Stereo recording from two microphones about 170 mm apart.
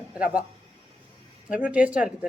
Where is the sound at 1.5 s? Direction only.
10° right (ahead or behind).